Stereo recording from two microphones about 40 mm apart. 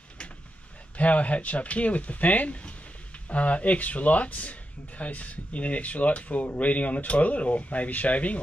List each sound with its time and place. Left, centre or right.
0.9 s speech: left